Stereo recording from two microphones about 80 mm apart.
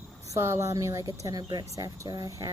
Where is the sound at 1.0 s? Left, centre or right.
Right.